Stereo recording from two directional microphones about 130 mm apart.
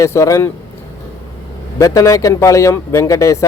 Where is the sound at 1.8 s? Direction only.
25° left (ahead or behind).